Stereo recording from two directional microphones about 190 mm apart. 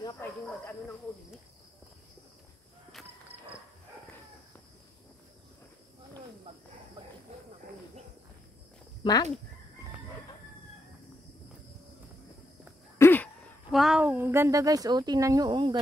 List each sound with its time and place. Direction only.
0.0 s speech: 10° left (ahead or behind)
9.0 s speech: 20° left (ahead or behind)
13.0 s a sound: 10° left (ahead or behind)
13.7 s speech: 5° right (ahead or behind); by 15.8 s 25° right (ahead or behind)